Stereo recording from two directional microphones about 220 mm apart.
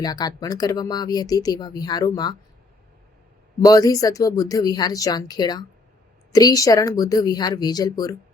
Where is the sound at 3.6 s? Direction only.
15° left (ahead or behind).